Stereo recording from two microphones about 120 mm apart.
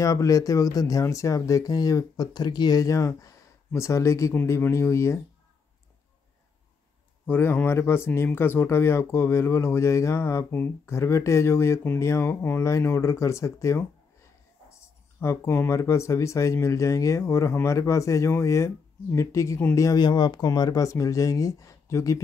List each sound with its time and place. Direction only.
0.0 s speech: 30° left (ahead or behind)
7.2 s speech: 20° left (ahead or behind)